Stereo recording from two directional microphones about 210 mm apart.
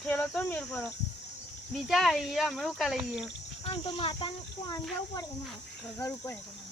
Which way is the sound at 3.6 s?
25° left (ahead or behind).